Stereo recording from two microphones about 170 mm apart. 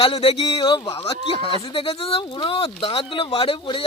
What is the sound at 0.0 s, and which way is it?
A man's voice, 35° left (ahead or behind).